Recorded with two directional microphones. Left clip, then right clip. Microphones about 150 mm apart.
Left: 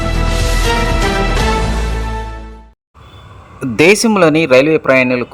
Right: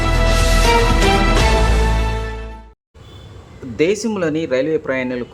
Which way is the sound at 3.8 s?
55° left (ahead or behind).